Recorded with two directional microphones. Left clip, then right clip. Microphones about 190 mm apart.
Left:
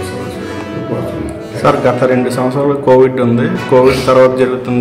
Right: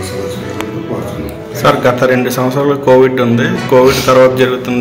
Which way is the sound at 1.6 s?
Centre (ahead or behind).